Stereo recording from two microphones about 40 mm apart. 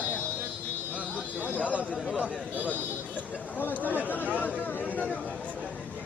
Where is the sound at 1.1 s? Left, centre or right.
Left.